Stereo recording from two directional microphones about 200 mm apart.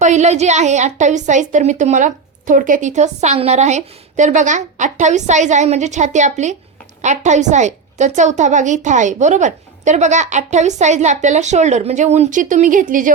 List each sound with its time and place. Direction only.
0.0 s a woman's voice: 35° right (ahead or behind)